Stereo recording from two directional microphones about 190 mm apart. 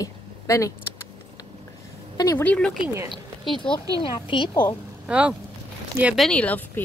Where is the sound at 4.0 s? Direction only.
25° left (ahead or behind).